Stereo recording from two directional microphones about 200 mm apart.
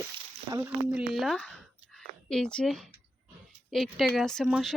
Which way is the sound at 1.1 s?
Centre (ahead or behind).